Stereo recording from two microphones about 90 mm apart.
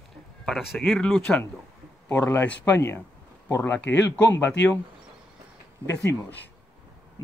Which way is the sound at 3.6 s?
15° left (ahead or behind).